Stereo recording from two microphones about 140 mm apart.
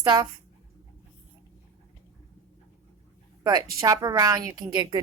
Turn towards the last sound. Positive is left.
turn(degrees=-25)  # may be behind; listen again after turning